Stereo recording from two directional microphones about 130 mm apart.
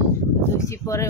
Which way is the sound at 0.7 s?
25° left (ahead or behind).